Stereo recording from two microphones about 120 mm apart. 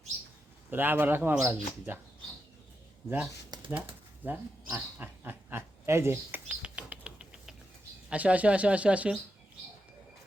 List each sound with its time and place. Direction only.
0.7 s speech: 15° right (ahead or behind)
3.7 s speech: 15° right (ahead or behind)
6.6 s a sound: 10° right (ahead or behind)
8.1 s speech: 10° right (ahead or behind)